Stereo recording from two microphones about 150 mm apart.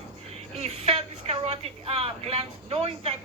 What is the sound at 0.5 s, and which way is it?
A woman's voice, 40° right (ahead or behind).